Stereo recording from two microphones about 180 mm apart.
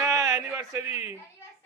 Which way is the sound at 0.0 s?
20° right (ahead or behind).